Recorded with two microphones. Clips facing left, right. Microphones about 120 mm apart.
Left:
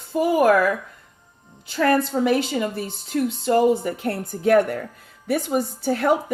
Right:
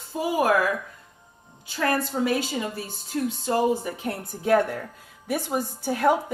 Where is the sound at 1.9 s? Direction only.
60° left (ahead or behind).